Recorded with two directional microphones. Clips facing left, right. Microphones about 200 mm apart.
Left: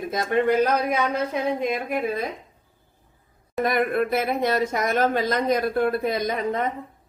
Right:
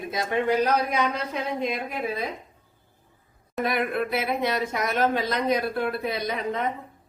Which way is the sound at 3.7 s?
45° left (ahead or behind).